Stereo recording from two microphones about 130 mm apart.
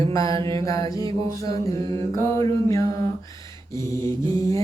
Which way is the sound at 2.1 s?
20° left (ahead or behind).